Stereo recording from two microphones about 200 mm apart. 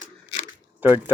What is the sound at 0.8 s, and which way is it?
Speech, 10° right (ahead or behind).